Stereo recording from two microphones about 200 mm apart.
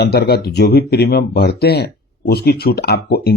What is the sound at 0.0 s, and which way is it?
Speech, 55° left (ahead or behind).